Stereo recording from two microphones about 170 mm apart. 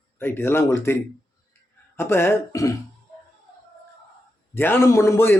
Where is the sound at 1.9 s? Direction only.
15° left (ahead or behind).